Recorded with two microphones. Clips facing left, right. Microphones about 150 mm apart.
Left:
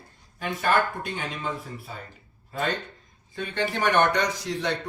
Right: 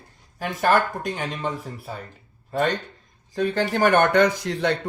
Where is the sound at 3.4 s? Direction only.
40° right (ahead or behind); by 4.7 s 60° right (ahead or behind).